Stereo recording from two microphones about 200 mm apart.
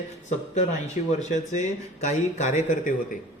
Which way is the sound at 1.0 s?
35° left (ahead or behind).